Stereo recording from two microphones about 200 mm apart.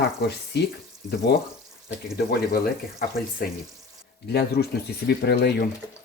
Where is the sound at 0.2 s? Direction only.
55° left (ahead or behind).